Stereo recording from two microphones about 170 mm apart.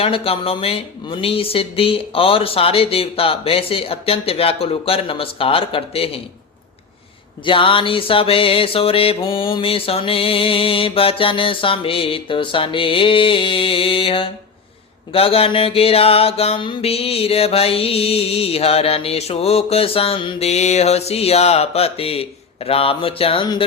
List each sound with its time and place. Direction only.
0.0 s mantra: 35° left (ahead or behind)
7.4 s mantra: 30° left (ahead or behind)